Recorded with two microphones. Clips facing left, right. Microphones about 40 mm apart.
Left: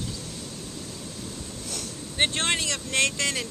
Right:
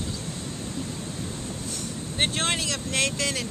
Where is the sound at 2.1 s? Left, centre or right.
Centre.